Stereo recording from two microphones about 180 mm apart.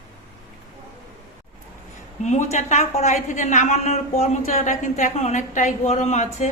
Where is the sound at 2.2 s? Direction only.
40° left (ahead or behind).